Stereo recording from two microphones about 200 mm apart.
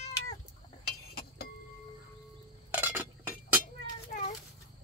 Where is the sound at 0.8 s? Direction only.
50° left (ahead or behind).